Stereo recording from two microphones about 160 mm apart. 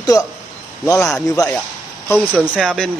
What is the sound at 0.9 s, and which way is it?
Speech, 20° left (ahead or behind).